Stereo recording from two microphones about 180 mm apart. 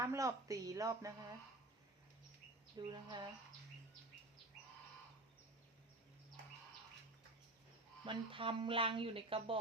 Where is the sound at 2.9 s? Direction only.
25° right (ahead or behind).